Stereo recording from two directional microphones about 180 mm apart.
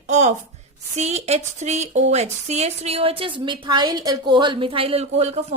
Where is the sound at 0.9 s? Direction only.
35° right (ahead or behind).